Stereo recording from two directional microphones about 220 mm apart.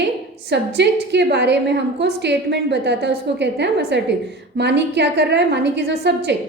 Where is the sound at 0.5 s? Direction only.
50° right (ahead or behind).